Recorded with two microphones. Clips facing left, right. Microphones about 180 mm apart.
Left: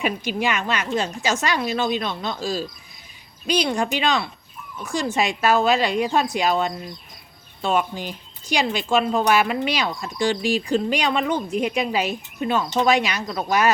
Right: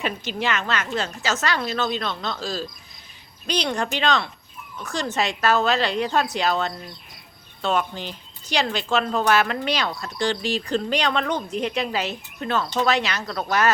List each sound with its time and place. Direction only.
0.0 s speech: 10° left (ahead or behind)